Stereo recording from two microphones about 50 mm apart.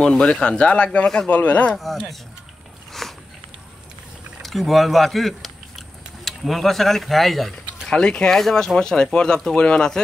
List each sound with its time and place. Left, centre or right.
0.0 s speech: centre
1.0 s speech: centre
1.3 s speech: left
1.7 s speech: centre
2.9 s a sound: centre
4.4 s speech: centre
7.9 s speech: centre